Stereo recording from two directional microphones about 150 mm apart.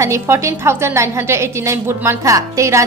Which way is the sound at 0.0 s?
20° right (ahead or behind).